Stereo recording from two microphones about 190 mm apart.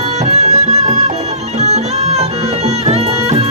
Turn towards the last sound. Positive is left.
turn(degrees=-35)  # may be behind; listen again after turning